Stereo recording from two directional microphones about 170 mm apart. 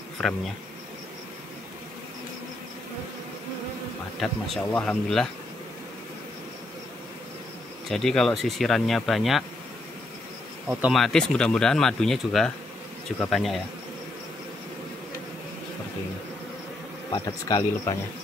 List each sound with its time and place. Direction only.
0.2 s speech: 5° left (ahead or behind)
4.2 s speech: 5° left (ahead or behind)
7.9 s speech: centre (ahead or behind)
10.7 s speech: 5° right (ahead or behind)
17.1 s speech: 25° left (ahead or behind)